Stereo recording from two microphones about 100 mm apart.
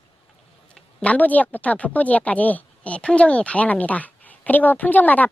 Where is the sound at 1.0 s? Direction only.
15° left (ahead or behind).